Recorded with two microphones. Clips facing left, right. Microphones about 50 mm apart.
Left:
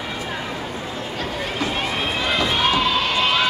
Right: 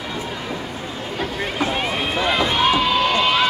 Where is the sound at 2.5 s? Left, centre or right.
Centre.